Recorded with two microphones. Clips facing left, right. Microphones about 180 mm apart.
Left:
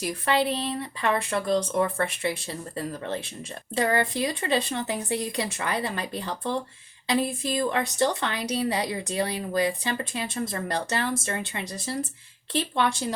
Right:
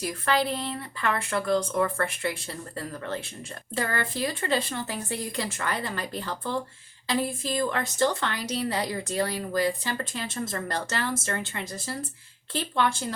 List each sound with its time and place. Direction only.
0.0 s a woman's voice: 20° left (ahead or behind)